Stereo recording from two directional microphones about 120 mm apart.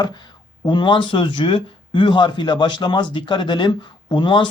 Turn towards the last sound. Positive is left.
turn(degrees=40)  # may be behind; listen again after turning